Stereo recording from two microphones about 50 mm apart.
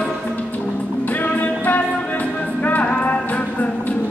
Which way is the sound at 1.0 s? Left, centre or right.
Left.